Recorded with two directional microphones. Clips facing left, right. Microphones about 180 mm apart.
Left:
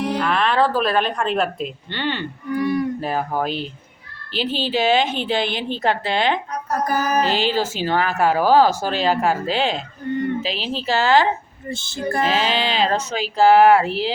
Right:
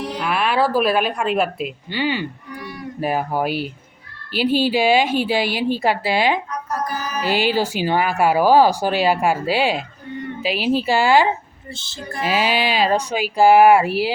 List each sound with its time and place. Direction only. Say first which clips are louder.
0.2 s speech: right 1 dB; 10° right (ahead or behind)
6.7 s music: left 7 dB; 50° left (ahead or behind)
7.2 s speech: even; 10° right (ahead or behind)
11.7 s music: left 8 dB; 50° left (ahead or behind)
12.2 s speech: right 3 dB; 10° right (ahead or behind)